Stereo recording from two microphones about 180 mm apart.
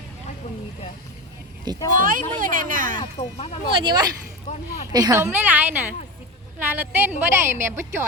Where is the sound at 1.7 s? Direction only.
25° right (ahead or behind).